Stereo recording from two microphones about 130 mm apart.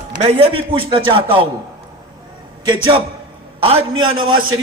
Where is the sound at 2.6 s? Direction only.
35° right (ahead or behind).